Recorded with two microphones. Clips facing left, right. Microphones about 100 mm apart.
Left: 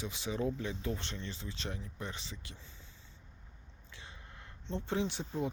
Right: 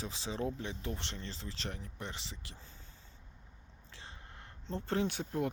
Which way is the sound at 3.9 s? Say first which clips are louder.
Even; 35° right (ahead or behind).